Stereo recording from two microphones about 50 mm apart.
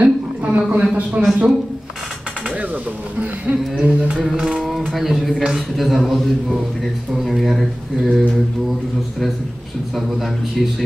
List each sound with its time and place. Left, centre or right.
0.0 s a sound: right
1.2 s music: right
2.4 s speech: right
3.8 s music: right
4.2 s a man's voice: centre
4.5 s a sound: centre
4.8 s a man's voice: centre
9.9 s a man's voice: centre